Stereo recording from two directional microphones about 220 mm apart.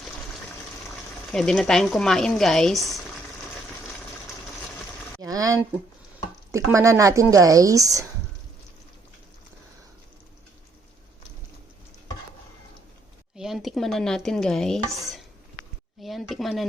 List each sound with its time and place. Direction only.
1.3 s speech: centre (ahead or behind)
5.2 s a sound: 15° right (ahead or behind)
6.5 s a woman's voice: 15° right (ahead or behind)
13.3 s speech: centre (ahead or behind)
16.0 s speech: centre (ahead or behind)